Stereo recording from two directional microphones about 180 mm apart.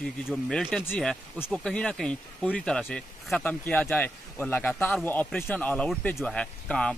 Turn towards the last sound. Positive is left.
turn(degrees=5)  # may be behind; listen again after turning